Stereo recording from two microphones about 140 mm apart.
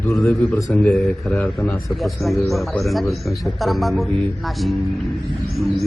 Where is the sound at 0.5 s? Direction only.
10° left (ahead or behind).